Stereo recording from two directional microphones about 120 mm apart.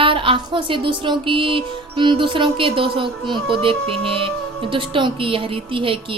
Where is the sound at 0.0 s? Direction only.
45° right (ahead or behind).